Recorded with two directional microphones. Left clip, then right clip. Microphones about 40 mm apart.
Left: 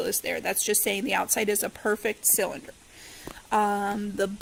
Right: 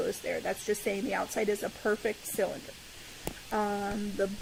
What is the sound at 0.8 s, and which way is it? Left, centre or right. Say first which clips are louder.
Speech: left 5 dB; left.